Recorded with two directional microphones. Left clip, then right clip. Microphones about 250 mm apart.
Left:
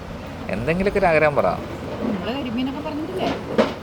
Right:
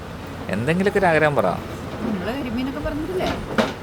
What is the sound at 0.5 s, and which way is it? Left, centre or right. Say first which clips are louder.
Speech: right 1 dB; centre.